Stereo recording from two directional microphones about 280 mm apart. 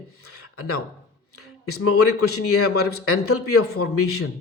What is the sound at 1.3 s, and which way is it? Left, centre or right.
Speech, left.